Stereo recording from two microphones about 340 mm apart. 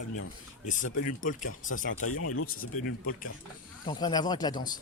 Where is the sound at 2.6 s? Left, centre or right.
Left.